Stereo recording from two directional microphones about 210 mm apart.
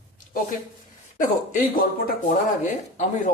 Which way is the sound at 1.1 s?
40° left (ahead or behind).